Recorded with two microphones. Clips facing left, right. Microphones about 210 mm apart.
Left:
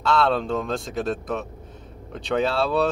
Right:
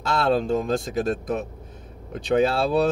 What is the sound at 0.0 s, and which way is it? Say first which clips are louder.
Speech: even; 45° right (ahead or behind).